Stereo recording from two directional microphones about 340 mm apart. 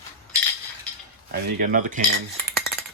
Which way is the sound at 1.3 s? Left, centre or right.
Right.